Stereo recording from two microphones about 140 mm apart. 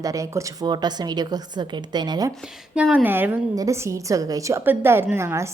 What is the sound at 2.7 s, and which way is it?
A woman's voice, 10° right (ahead or behind).